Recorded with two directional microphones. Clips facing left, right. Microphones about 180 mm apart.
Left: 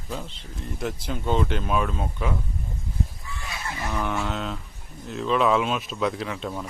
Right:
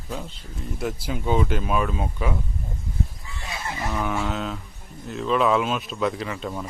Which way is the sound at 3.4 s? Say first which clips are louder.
Right 3 dB; 20° right (ahead or behind).